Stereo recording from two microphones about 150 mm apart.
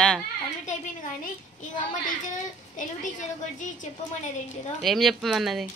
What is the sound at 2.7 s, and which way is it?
A woman's voice, 55° left (ahead or behind).